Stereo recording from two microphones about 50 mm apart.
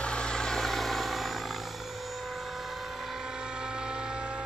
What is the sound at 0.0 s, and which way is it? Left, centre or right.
Vehicle, centre.